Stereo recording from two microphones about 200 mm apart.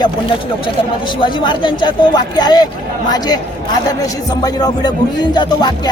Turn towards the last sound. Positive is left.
turn(degrees=20)  # may be behind; listen again after turning